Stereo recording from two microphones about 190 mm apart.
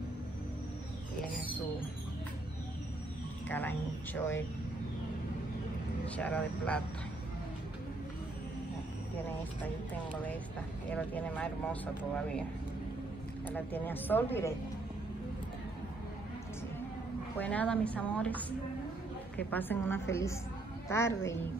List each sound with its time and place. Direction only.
3.4 s speech: 10° left (ahead or behind)
6.0 s speech: 5° left (ahead or behind)
10.9 s speech: 5° left (ahead or behind)
13.5 s speech: 10° left (ahead or behind)
17.4 s speech: 5° left (ahead or behind)
19.5 s speech: 10° left (ahead or behind)